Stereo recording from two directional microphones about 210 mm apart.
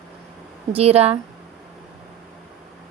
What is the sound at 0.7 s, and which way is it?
Speech, 30° right (ahead or behind).